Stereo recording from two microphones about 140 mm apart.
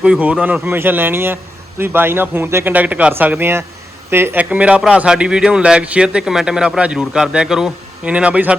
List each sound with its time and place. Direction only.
0.0 s speech: 10° right (ahead or behind)